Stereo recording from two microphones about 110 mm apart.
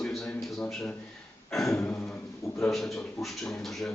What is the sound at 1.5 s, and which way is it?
Speech, 5° left (ahead or behind).